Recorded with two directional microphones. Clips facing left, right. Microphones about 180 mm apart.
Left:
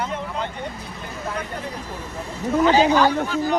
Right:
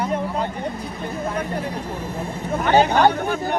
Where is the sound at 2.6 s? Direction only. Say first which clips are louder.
Right 1 dB; 55° right (ahead or behind).